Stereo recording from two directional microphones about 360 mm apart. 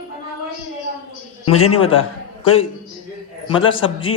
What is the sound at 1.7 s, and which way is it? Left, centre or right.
Speech, centre.